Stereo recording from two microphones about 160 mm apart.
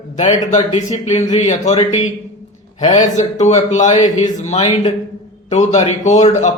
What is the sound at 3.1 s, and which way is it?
A man's voice, 50° left (ahead or behind).